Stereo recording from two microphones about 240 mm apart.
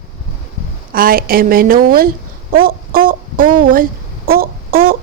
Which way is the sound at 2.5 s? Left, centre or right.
Right.